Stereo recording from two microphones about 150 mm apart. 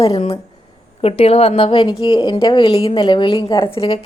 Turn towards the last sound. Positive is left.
turn(degrees=40)  # may be behind; listen again after turning